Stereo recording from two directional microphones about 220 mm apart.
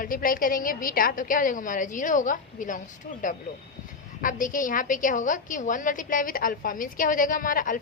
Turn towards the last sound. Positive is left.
turn(degrees=40)  # may be behind; listen again after turning